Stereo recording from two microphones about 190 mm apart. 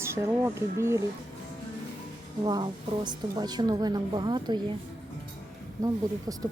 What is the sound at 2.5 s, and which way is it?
A woman's voice, 20° right (ahead or behind).